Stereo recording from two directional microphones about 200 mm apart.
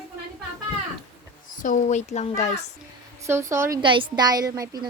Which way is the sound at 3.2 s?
15° right (ahead or behind).